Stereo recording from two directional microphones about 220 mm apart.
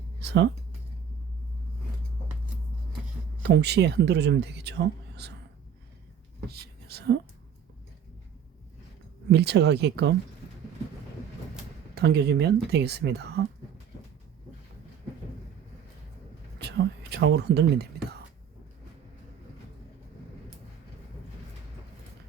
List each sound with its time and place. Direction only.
0.2 s speech: 50° right (ahead or behind)
3.4 s speech: 50° right (ahead or behind)
6.5 s speech: 45° right (ahead or behind)
9.3 s speech: 50° right (ahead or behind)
11.9 s speech: 50° right (ahead or behind)
16.6 s whispering: 50° right (ahead or behind)